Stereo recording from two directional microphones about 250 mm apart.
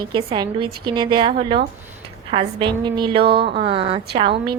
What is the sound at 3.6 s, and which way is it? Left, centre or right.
Speech, right.